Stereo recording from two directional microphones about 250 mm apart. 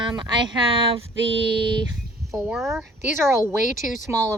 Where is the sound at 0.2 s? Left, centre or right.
Centre.